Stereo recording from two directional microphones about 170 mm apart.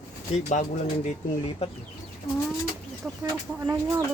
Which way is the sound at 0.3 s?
45° left (ahead or behind).